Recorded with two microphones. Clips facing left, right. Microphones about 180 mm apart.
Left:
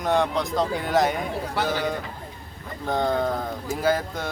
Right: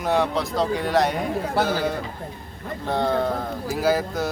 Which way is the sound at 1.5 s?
45° right (ahead or behind).